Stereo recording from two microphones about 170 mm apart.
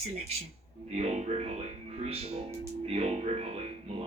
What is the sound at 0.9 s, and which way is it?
Speech, 40° right (ahead or behind).